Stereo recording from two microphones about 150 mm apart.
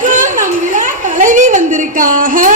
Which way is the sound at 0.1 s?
55° right (ahead or behind).